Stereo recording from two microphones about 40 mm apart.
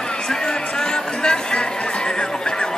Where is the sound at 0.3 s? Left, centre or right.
Centre.